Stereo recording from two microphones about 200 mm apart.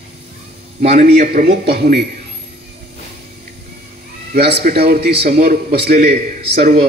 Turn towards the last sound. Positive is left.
turn(degrees=-50)  # may be behind; listen again after turning